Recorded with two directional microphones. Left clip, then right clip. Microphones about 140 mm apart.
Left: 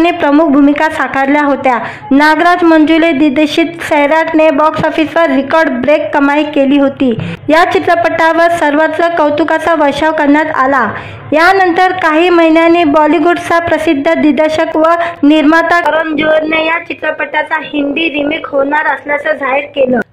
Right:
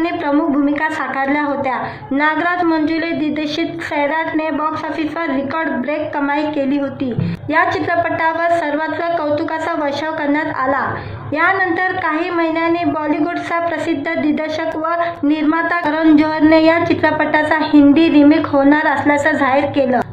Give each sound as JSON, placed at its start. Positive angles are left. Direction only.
{"t": 0.0, "sound": "a woman's voice", "side_deg": 35}